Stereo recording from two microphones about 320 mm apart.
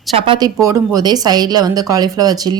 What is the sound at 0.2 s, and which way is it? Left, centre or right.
A woman's voice, centre.